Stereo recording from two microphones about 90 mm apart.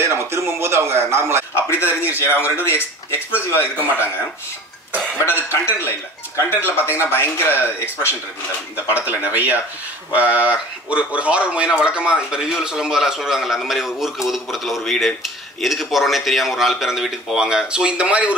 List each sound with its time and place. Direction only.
0.0 s speech: 30° right (ahead or behind)
1.5 s speech: 30° left (ahead or behind)
5.5 s speech: 25° left (ahead or behind)
8.7 s speech: 20° right (ahead or behind)